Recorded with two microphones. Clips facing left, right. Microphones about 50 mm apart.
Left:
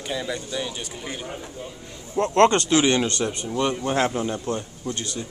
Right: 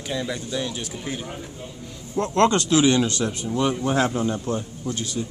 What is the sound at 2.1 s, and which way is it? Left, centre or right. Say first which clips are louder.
Speech: left 2 dB; left.